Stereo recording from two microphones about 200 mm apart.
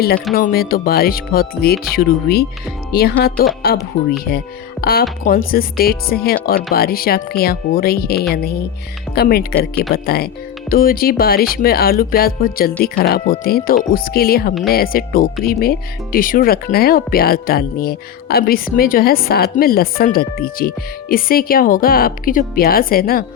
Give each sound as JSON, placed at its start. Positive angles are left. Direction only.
{"t": 0.3, "sound": "speech", "side_deg": 50}